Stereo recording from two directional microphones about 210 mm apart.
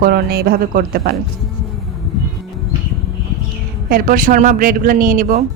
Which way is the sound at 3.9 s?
40° right (ahead or behind).